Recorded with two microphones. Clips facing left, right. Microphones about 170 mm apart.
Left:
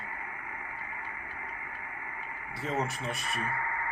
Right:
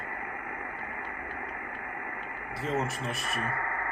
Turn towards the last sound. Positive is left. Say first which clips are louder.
# right 1 dB
turn(degrees=-55)  # may be behind; listen again after turning